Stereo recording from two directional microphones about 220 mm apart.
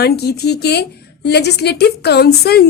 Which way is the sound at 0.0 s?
45° left (ahead or behind).